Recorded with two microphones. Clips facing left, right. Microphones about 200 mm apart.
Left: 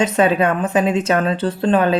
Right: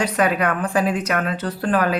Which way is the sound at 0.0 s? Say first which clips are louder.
Left 4 dB; 25° left (ahead or behind).